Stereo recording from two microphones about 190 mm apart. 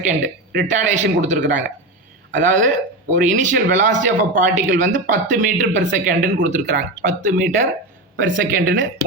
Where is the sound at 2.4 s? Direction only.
40° right (ahead or behind).